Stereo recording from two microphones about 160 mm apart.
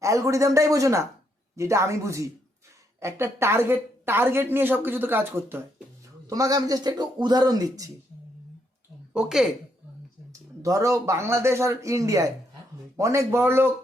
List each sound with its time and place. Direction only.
0.0 s a woman's voice: 20° right (ahead or behind)
9.1 s speech: centre (ahead or behind)
10.6 s a woman's voice: 20° right (ahead or behind)